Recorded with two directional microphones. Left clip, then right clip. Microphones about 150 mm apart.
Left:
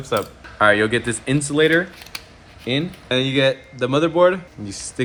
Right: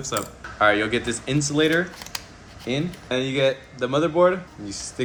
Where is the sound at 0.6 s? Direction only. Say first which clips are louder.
Left 4 dB; 55° left (ahead or behind).